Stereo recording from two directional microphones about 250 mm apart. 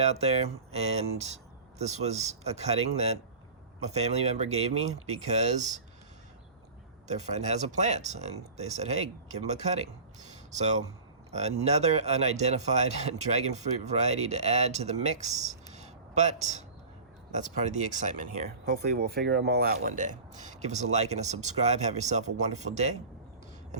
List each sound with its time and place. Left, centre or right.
0.0 s speech: right
7.1 s speech: right